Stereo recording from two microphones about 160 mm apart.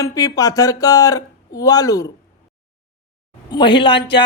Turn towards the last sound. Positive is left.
turn(degrees=30)  # may be behind; listen again after turning